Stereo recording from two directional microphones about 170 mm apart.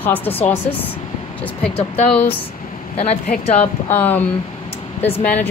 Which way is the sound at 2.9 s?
40° left (ahead or behind).